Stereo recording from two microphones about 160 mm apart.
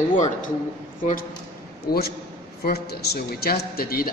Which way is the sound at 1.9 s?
75° left (ahead or behind).